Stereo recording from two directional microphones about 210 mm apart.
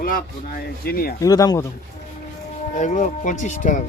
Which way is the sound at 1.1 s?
15° left (ahead or behind).